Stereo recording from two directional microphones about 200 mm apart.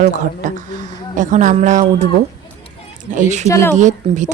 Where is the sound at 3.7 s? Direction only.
40° right (ahead or behind).